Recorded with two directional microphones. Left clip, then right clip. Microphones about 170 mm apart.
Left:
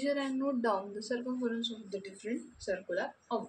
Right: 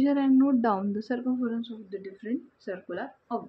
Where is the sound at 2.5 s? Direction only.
40° right (ahead or behind).